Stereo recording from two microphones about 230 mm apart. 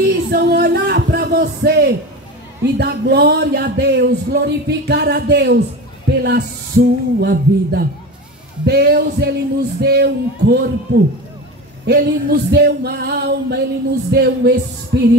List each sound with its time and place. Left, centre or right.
0.0 s a sound: right
2.6 s speech: right
11.8 s speech: right